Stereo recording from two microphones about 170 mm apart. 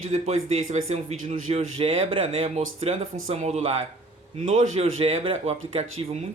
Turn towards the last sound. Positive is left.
turn(degrees=-35)  # may be behind; listen again after turning